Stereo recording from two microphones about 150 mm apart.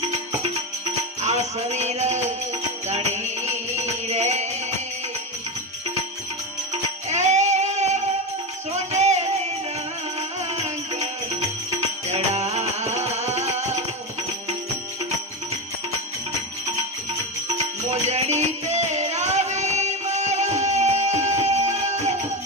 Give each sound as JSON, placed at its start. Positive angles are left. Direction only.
{"t": 1.2, "sound": "music", "side_deg": -50}
{"t": 7.1, "sound": "child singing", "side_deg": -50}
{"t": 8.7, "sound": "music", "side_deg": -50}
{"t": 10.5, "sound": "music", "side_deg": -50}
{"t": 17.8, "sound": "music", "side_deg": -50}